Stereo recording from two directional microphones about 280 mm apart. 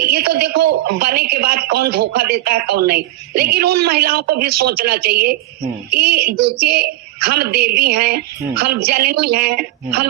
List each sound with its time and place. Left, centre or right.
0.0 s a man's voice: right